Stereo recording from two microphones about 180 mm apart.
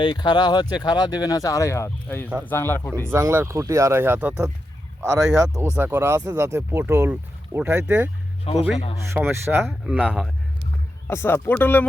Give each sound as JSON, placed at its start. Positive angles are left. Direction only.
{"t": 0.0, "sound": "speech", "side_deg": 25}
{"t": 2.9, "sound": "speech", "side_deg": -15}
{"t": 9.1, "sound": "speech", "side_deg": -10}
{"t": 11.1, "sound": "speech", "side_deg": 15}